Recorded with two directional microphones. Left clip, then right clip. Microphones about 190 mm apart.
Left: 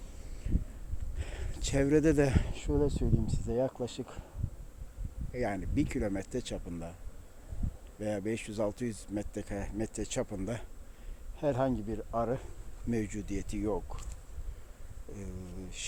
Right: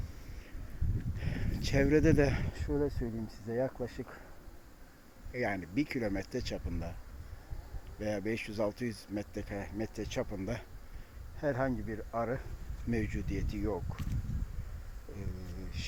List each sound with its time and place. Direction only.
1.2 s speech: 5° left (ahead or behind)
5.3 s speech: 10° left (ahead or behind)
7.9 s speech: 5° left (ahead or behind)